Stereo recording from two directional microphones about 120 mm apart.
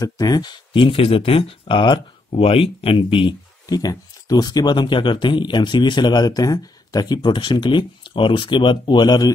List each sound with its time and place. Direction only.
0.0 s speech: 30° left (ahead or behind)
3.6 s speech: 30° left (ahead or behind)